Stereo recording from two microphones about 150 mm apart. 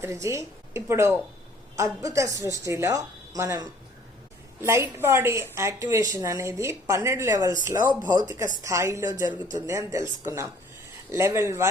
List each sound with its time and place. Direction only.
0.0 s a woman's voice: 20° right (ahead or behind)